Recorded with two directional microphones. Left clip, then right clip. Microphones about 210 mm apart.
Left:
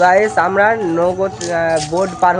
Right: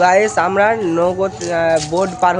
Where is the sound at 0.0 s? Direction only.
5° right (ahead or behind).